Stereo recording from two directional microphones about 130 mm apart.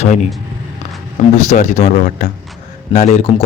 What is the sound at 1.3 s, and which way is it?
Speech, 65° left (ahead or behind).